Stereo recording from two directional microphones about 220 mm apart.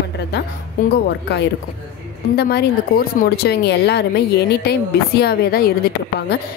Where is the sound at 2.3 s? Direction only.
45° left (ahead or behind).